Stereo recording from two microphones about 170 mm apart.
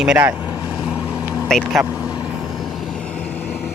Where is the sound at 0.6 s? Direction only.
5° right (ahead or behind).